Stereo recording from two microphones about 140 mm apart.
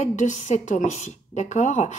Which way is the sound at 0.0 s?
60° left (ahead or behind).